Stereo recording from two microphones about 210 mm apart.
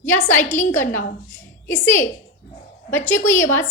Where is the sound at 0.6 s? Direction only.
10° left (ahead or behind).